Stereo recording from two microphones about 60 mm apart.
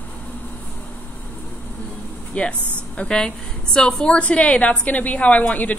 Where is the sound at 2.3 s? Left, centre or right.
Left.